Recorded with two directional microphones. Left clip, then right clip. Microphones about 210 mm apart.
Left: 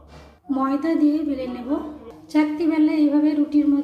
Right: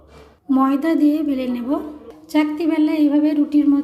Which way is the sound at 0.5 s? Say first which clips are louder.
Right 4 dB; 45° right (ahead or behind).